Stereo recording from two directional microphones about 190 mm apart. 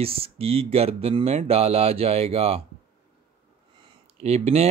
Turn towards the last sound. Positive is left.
turn(degrees=-35)  # may be behind; listen again after turning